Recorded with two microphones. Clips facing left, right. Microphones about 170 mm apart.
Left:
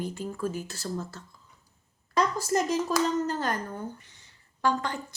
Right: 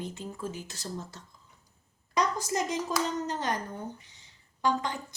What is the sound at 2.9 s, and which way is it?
Speech, 15° right (ahead or behind).